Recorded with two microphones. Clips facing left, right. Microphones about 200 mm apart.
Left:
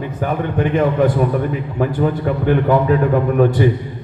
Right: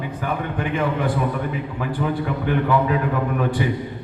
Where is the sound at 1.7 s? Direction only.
45° left (ahead or behind).